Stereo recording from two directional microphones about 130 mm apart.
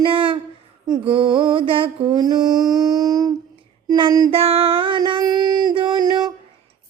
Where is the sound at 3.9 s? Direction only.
35° right (ahead or behind).